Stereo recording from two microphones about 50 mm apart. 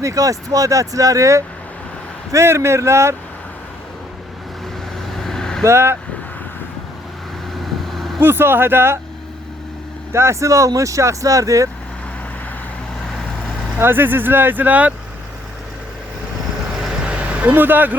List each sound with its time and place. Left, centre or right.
0.0 s speech: right
2.3 s speech: right
5.1 s vehicle: centre
5.6 s speech: right
7.6 s vehicle: centre
8.2 s speech: right
10.1 s speech: right
13.7 s speech: right
17.0 s vehicle: right
17.5 s speech: right